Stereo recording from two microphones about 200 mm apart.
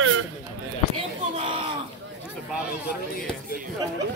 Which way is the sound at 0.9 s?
25° right (ahead or behind).